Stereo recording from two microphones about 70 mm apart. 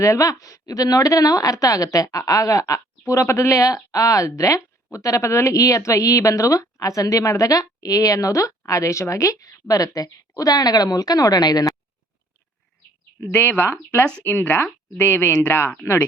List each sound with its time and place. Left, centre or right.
0.0 s a woman's voice: left
13.3 s speech: left